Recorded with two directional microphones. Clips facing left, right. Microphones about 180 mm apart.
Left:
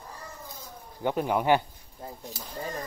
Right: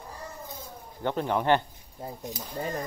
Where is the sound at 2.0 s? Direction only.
15° right (ahead or behind).